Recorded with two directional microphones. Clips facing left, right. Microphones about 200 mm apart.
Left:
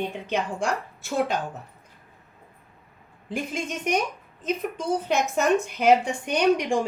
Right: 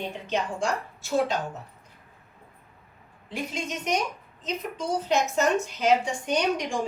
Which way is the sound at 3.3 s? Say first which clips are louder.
Left 2 dB; 50° left (ahead or behind).